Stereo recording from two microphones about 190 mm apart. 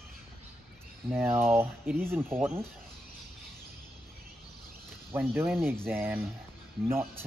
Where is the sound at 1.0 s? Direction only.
10° right (ahead or behind).